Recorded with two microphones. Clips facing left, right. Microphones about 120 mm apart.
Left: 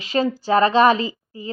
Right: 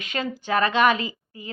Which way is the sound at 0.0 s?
35° left (ahead or behind).